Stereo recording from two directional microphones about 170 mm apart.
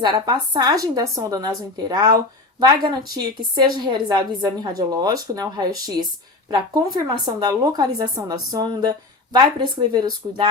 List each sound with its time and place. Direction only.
0.0 s speech: 25° right (ahead or behind)